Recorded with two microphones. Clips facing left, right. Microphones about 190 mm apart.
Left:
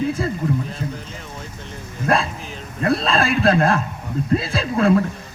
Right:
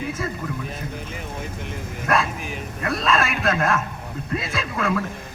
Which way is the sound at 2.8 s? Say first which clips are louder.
Left 4 dB; 30° left (ahead or behind).